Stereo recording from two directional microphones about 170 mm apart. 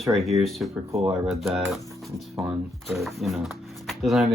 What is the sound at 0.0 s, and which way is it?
Speech, centre (ahead or behind).